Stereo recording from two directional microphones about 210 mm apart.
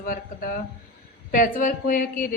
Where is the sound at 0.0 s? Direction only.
40° left (ahead or behind).